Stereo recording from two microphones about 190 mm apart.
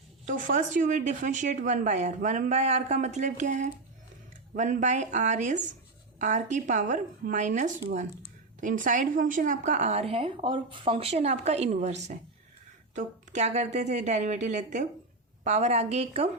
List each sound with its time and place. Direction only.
0.3 s a woman's voice: 40° right (ahead or behind)